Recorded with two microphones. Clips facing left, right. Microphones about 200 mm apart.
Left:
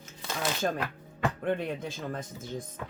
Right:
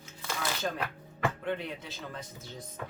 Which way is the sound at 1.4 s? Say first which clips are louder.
Left 5 dB; 50° left (ahead or behind).